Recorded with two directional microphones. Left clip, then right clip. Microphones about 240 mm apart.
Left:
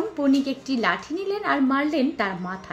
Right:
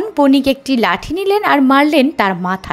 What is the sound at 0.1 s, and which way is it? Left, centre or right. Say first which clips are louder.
A woman's voice: right 11 dB; right.